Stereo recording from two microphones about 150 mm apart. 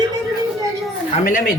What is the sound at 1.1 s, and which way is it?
Speech, 60° left (ahead or behind).